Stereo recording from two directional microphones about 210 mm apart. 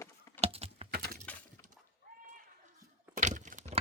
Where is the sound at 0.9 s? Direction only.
45° right (ahead or behind).